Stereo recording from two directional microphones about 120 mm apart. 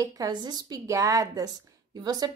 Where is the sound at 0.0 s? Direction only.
30° right (ahead or behind).